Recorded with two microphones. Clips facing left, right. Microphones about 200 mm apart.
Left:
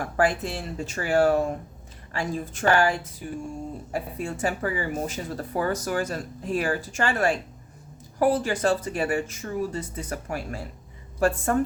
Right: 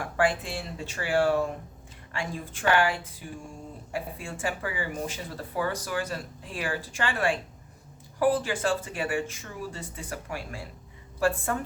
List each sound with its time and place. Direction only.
0.0 s speech: 40° left (ahead or behind)